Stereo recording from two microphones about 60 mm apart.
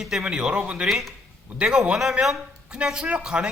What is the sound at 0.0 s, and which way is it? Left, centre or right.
Speech, centre.